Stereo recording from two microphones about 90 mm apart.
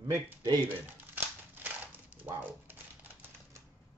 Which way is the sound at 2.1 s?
20° right (ahead or behind).